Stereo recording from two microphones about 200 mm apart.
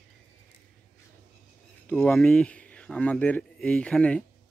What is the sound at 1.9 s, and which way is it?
Speech, 10° left (ahead or behind).